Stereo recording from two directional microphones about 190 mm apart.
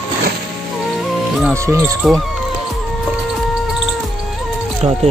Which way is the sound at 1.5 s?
15° right (ahead or behind).